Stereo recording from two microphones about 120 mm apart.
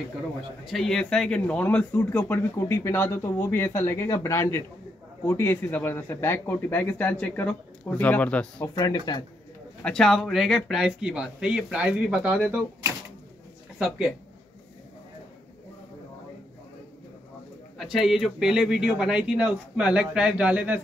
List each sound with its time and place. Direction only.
0.7 s speech: 5° left (ahead or behind)
9.8 s speech: 5° left (ahead or behind)
13.7 s speech: 10° right (ahead or behind)
17.7 s speech: 5° right (ahead or behind)